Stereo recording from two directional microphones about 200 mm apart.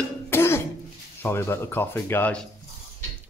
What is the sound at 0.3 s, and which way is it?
Cough, 15° left (ahead or behind).